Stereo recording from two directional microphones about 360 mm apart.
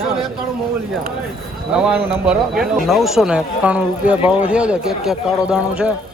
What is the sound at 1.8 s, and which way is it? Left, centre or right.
A man's voice, centre.